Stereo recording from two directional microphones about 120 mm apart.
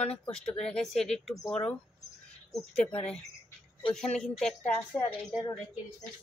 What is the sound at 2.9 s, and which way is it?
Speech, 60° left (ahead or behind).